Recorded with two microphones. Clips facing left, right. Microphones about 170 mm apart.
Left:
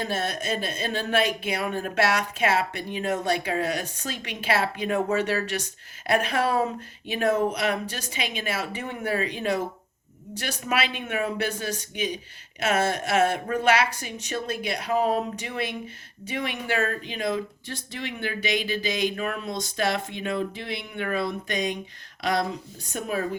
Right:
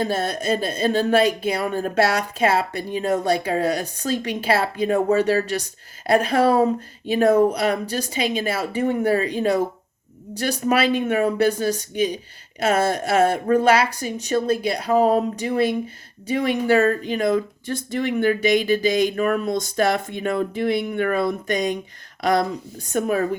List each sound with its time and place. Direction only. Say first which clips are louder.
0.0 s speech: right 6 dB; 35° right (ahead or behind)
10.7 s speech: right 8 dB; 40° right (ahead or behind)